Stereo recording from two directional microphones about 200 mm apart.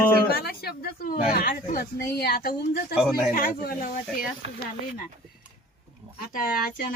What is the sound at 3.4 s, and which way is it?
Speech, 45° left (ahead or behind).